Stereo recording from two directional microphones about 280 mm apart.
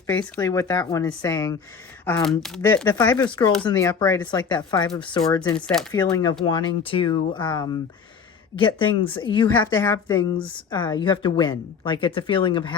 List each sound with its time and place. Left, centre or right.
0.1 s a woman's voice: centre
5.9 s a woman's voice: centre